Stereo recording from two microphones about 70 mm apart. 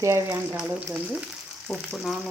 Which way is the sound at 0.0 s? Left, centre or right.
Right.